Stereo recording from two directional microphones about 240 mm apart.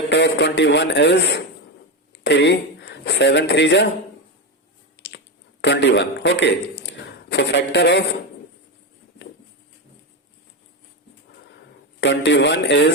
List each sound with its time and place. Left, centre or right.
0.1 s a man's voice: left
5.6 s a man's voice: left
6.8 s a sound: left
11.9 s a man's voice: left